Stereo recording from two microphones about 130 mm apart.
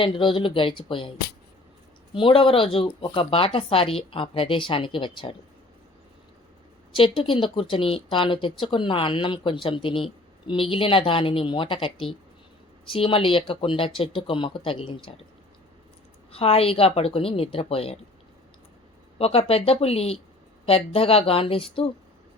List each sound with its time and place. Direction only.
0.0 s speech: 40° left (ahead or behind)
2.1 s speech: 45° left (ahead or behind)
6.9 s speech: 45° left (ahead or behind)
16.3 s speech: 50° left (ahead or behind)
19.2 s speech: 50° left (ahead or behind)